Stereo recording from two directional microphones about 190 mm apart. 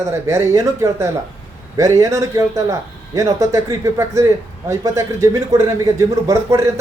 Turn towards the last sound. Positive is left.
turn(degrees=-15)  # may be behind; listen again after turning